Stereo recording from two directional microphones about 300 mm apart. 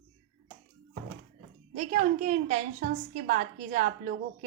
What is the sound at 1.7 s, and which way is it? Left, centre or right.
A woman's voice, right.